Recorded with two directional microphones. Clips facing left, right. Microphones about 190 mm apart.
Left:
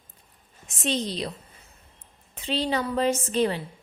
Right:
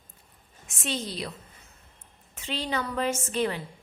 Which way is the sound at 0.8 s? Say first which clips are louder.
Left 5 dB; 20° left (ahead or behind).